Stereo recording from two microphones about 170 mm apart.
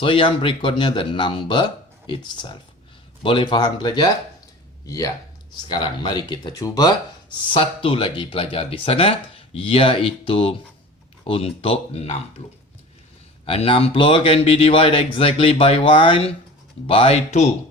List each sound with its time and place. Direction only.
0.0 s speech: 30° left (ahead or behind)
13.4 s speech: 35° left (ahead or behind)